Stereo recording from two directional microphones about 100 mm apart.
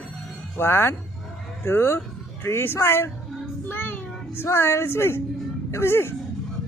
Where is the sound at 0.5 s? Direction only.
25° left (ahead or behind).